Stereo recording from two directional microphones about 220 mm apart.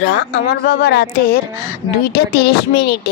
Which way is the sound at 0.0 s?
50° left (ahead or behind).